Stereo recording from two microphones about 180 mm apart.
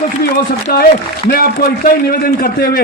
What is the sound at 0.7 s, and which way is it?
A man's voice, 55° left (ahead or behind).